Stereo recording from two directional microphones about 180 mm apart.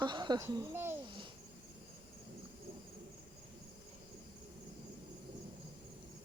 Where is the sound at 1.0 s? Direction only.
25° right (ahead or behind).